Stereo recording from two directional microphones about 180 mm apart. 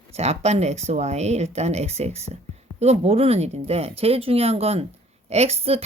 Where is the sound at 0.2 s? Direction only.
35° right (ahead or behind).